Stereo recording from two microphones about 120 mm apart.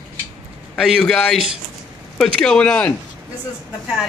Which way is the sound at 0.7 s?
Centre (ahead or behind).